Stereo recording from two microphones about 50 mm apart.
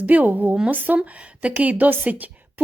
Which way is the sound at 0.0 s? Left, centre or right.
Right.